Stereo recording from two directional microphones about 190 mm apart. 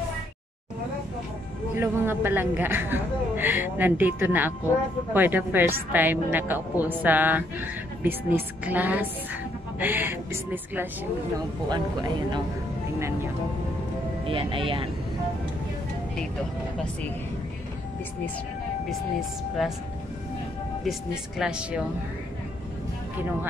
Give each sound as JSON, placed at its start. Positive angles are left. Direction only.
{"t": 1.8, "sound": "speech", "side_deg": -10}
{"t": 11.7, "sound": "speech", "side_deg": -25}
{"t": 14.2, "sound": "speech", "side_deg": -30}
{"t": 20.8, "sound": "speech", "side_deg": -5}